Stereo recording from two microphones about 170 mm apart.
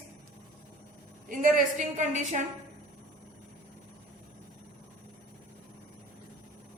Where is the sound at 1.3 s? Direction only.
50° right (ahead or behind).